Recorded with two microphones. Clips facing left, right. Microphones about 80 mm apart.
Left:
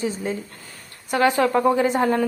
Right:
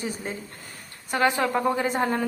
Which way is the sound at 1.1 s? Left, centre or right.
Right.